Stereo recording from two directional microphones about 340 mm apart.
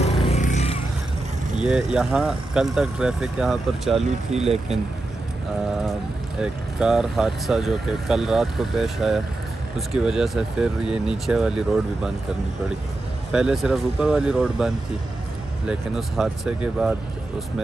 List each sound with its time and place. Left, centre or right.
0.0 s music: centre
1.6 s speech: centre
6.4 s speech: centre
13.3 s speech: centre